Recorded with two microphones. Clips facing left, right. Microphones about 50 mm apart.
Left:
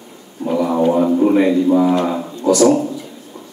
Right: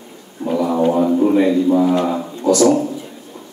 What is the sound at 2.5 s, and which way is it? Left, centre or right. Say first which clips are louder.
Speech: left 1 dB; left.